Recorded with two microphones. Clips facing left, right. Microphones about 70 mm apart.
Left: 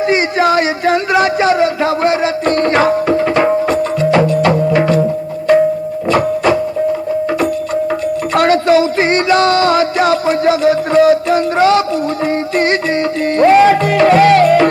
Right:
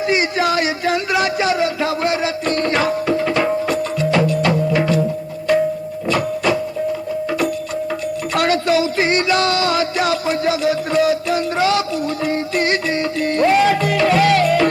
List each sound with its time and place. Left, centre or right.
0.1 s a sound: left
5.5 s music: left
8.3 s music: left